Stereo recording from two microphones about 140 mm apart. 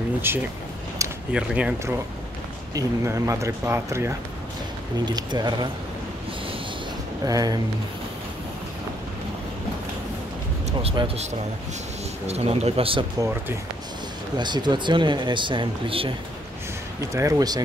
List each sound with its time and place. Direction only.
0.3 s speech: 15° right (ahead or behind)
2.7 s speech: 20° right (ahead or behind)
5.0 s speech: 30° right (ahead or behind)
7.2 s speech: 25° right (ahead or behind)
10.8 s speech: 45° right (ahead or behind)
12.3 s speech: 45° right (ahead or behind)
14.3 s speech: 30° right (ahead or behind)
17.1 s speech: 25° right (ahead or behind)